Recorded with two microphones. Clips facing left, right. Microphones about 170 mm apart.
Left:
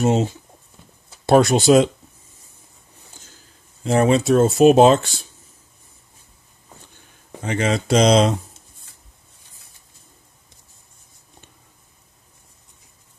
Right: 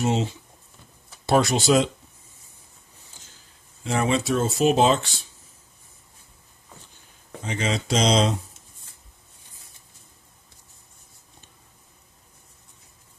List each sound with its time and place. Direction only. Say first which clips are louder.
0.0 s speech: left 5 dB; 45° left (ahead or behind)
3.8 s speech: left 7 dB; 40° left (ahead or behind)
7.4 s speech: left 6 dB; 55° left (ahead or behind)